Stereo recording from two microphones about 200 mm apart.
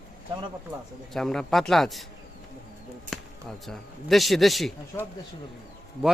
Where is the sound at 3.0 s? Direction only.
Centre (ahead or behind).